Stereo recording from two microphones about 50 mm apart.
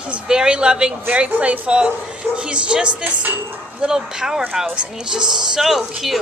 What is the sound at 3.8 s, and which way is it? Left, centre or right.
Speech, centre.